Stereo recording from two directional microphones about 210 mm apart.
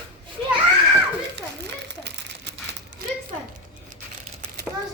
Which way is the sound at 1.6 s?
55° right (ahead or behind).